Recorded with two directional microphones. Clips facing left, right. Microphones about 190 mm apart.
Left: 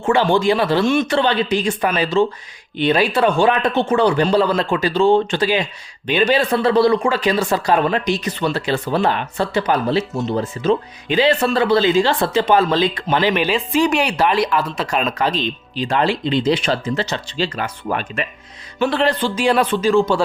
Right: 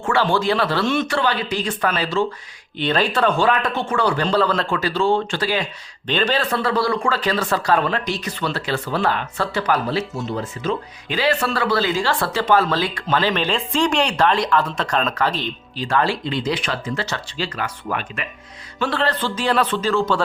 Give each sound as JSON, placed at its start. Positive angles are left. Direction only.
{"t": 0.0, "sound": "speech", "side_deg": 20}
{"t": 18.8, "sound": "speech", "side_deg": 15}